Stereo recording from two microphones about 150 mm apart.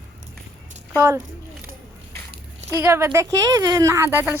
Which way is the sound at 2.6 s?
20° right (ahead or behind).